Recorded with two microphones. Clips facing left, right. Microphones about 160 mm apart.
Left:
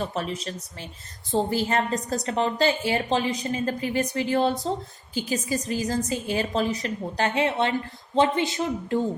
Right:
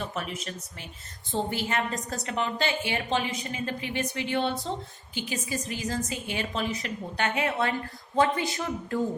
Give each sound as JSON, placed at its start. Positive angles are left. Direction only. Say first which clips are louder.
{"t": 0.0, "sound": "a woman's voice", "louder": "left 5 dB", "side_deg": 35}